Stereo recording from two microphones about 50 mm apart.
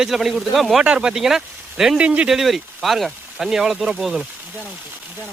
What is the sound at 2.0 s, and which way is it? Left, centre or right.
Speech, right.